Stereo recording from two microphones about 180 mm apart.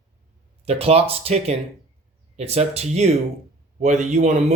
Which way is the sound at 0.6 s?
35° right (ahead or behind).